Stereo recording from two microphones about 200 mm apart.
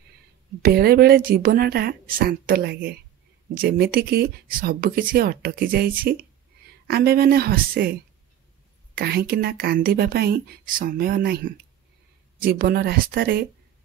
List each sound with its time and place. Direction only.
0.6 s speech: 50° right (ahead or behind)
8.9 s a woman's voice: 50° right (ahead or behind)